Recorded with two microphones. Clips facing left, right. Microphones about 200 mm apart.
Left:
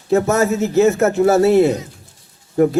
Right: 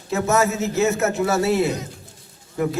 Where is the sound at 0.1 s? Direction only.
50° left (ahead or behind).